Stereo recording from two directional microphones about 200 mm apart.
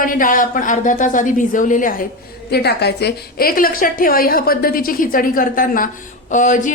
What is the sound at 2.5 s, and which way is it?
A woman's voice, 55° left (ahead or behind).